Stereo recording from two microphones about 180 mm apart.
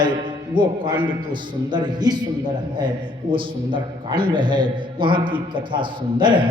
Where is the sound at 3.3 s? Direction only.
25° right (ahead or behind).